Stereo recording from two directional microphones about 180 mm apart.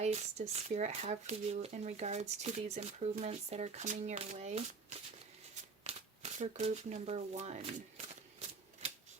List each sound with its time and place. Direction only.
0.0 s speech: 35° right (ahead or behind)